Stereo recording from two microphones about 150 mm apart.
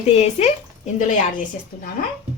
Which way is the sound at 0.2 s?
45° left (ahead or behind).